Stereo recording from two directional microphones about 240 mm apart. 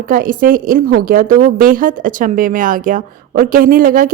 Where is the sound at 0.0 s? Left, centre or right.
Right.